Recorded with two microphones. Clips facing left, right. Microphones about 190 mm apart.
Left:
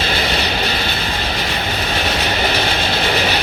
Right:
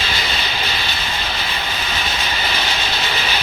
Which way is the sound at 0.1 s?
70° left (ahead or behind).